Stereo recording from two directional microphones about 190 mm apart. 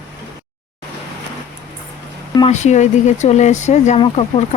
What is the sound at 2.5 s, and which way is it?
Speech, 40° left (ahead or behind).